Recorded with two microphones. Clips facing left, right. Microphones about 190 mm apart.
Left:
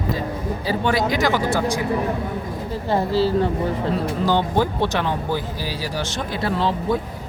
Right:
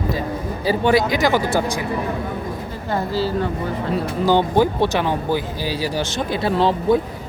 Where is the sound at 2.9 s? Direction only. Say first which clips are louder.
Left 2 dB; 30° left (ahead or behind).